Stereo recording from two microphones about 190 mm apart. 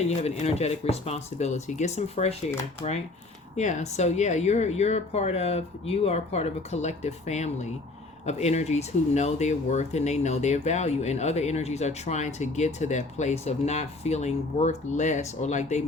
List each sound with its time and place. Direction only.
0.1 s speech: 35° left (ahead or behind)